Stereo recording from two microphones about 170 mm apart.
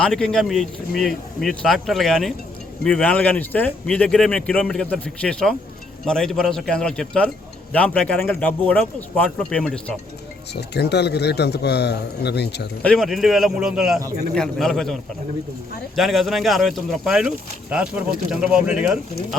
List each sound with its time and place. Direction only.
0.0 s speech: 5° left (ahead or behind)
10.5 s a man's voice: 80° left
12.8 s speech: 5° left (ahead or behind)
16.0 s speech: centre (ahead or behind)